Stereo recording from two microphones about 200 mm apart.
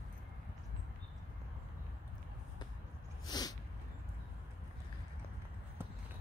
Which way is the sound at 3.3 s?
20° left (ahead or behind).